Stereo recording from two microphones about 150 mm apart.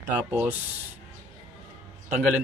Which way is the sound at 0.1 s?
5° right (ahead or behind).